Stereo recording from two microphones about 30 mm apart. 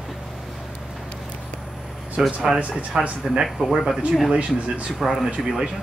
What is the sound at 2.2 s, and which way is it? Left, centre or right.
Speech, right.